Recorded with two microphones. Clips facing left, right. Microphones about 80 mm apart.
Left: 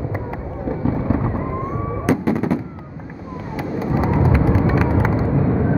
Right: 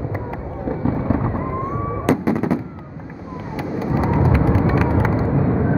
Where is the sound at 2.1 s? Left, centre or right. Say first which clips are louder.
Even; centre.